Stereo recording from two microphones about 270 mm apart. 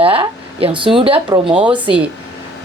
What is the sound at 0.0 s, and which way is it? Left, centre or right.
Speech, right.